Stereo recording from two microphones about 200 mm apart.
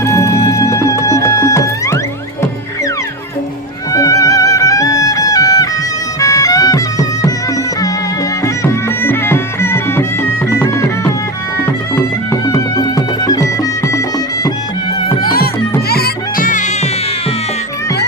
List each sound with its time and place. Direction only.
0.0 s music: 15° left (ahead or behind)
3.9 s music: 15° left (ahead or behind)
12.5 s music: 20° left (ahead or behind)
15.2 s music: 45° left (ahead or behind)